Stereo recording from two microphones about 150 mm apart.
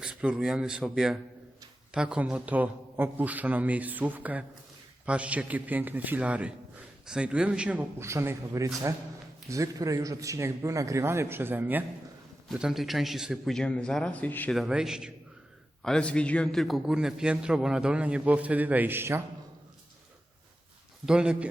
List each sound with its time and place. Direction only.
0.0 s a man's voice: 5° right (ahead or behind); by 14.5 s 10° left (ahead or behind)
14.5 s a man's voice: 5° right (ahead or behind)
21.1 s a man's voice: 5° right (ahead or behind)